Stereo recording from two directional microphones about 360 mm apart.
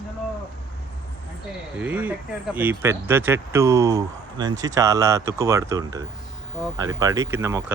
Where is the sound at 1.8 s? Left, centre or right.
Centre.